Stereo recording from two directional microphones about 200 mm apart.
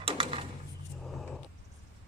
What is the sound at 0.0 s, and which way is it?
Drawer open or close, 25° right (ahead or behind).